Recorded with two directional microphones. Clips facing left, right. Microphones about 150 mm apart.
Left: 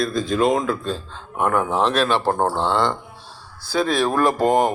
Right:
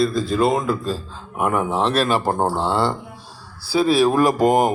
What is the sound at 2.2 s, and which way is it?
A man's voice, 15° right (ahead or behind).